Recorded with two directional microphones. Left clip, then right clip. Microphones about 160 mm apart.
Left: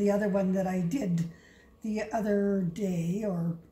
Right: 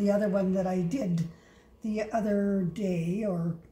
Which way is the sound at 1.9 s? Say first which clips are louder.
Right 1 dB; 35° right (ahead or behind).